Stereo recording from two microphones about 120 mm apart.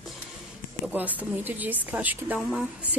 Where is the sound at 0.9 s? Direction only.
15° right (ahead or behind).